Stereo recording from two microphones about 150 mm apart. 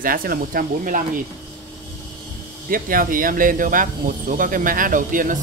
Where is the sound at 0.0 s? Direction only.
70° right (ahead or behind).